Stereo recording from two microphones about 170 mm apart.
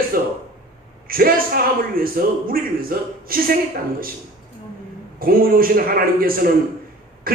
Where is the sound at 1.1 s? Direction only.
60° right (ahead or behind).